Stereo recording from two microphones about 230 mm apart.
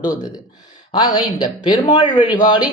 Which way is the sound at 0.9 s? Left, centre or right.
Left.